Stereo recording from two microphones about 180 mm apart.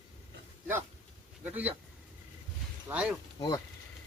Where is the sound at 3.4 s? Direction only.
25° left (ahead or behind).